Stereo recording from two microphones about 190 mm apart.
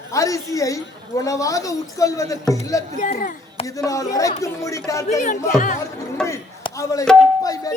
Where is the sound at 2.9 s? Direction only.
40° left (ahead or behind).